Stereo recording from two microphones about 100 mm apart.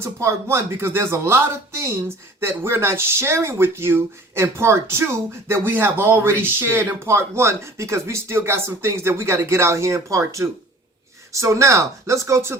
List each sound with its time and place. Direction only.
0.0 s speech: 30° right (ahead or behind)